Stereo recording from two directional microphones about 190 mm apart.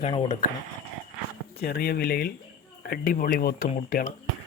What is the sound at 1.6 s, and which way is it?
Speech, 55° left (ahead or behind).